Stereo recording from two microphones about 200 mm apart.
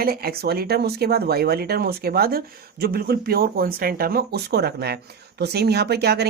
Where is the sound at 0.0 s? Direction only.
50° right (ahead or behind).